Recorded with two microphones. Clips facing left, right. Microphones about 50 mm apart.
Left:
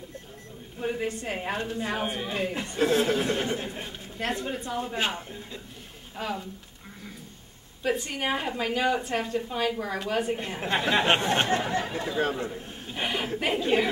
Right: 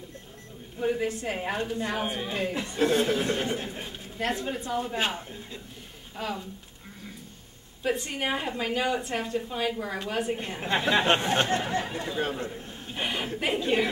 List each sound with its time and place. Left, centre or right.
0.7 s a woman's voice: centre
7.8 s a woman's voice: centre
11.3 s a sound: centre
11.7 s speech: left
12.4 s chuckle: centre
13.4 s a woman's voice: centre